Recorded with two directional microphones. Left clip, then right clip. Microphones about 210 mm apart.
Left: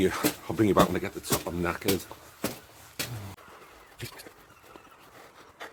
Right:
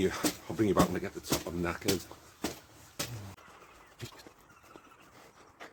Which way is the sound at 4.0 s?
15° left (ahead or behind).